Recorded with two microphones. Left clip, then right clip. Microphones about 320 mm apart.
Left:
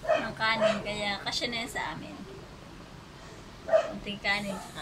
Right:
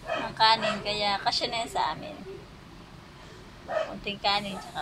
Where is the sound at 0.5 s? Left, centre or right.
Centre.